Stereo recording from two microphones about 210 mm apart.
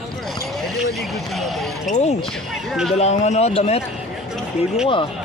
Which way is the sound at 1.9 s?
35° left (ahead or behind).